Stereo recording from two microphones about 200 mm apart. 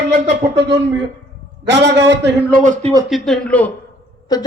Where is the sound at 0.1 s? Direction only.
60° right (ahead or behind).